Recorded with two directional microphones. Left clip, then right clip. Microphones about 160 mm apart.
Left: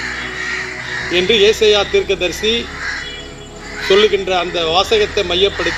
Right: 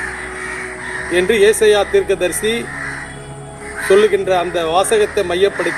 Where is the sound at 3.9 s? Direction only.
55° right (ahead or behind).